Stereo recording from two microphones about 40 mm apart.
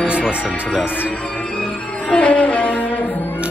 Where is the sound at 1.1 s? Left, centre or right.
Left.